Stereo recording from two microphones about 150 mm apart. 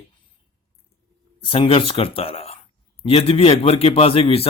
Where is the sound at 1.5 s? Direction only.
40° left (ahead or behind).